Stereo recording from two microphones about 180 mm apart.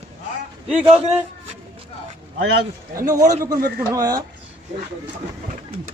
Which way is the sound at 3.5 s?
55° right (ahead or behind).